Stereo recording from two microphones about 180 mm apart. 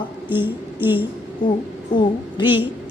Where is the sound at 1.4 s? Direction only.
25° left (ahead or behind).